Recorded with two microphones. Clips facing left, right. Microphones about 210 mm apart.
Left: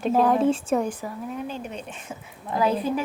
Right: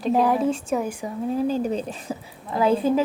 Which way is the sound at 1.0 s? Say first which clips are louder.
Right 8 dB; 30° right (ahead or behind).